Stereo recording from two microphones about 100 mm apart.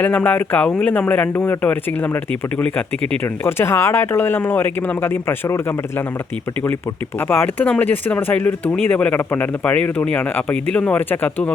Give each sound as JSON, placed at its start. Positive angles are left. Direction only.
{"t": 0.0, "sound": "speech", "side_deg": 15}
{"t": 3.4, "sound": "speech", "side_deg": 25}
{"t": 7.2, "sound": "speech", "side_deg": 20}